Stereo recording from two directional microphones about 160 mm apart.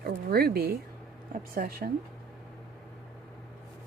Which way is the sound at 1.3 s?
60° right (ahead or behind).